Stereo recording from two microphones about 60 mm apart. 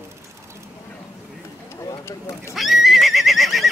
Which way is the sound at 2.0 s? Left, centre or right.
Left.